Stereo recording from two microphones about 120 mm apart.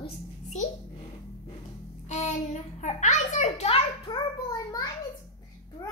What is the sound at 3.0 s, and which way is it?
A child's voice, 85° left.